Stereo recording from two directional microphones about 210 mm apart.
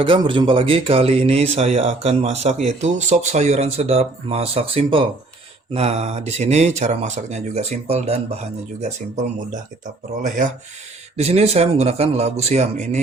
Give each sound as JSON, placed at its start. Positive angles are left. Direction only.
{"t": 0.0, "sound": "speech", "side_deg": -25}